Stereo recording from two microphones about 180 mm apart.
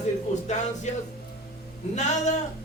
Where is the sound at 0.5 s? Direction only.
40° left (ahead or behind).